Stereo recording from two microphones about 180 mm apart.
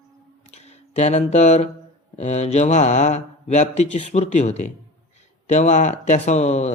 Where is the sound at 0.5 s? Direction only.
40° left (ahead or behind).